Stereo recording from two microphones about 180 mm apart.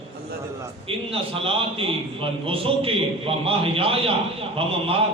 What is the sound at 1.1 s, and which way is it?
A man's voice, 30° right (ahead or behind).